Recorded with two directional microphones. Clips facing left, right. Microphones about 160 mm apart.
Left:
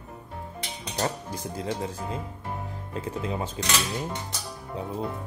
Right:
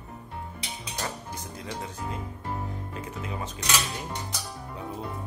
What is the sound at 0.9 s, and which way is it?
Speech, 30° left (ahead or behind).